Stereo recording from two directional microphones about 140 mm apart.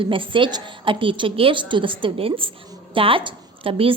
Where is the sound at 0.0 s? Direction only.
40° right (ahead or behind).